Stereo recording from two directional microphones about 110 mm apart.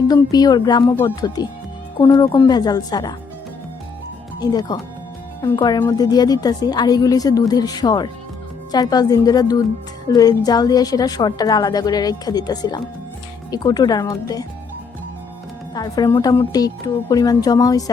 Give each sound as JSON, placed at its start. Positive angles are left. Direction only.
{"t": 0.1, "sound": "a woman's voice", "side_deg": 35}
{"t": 2.5, "sound": "a woman's voice", "side_deg": 40}
{"t": 4.4, "sound": "a woman's voice", "side_deg": 35}
{"t": 15.7, "sound": "a woman's voice", "side_deg": 35}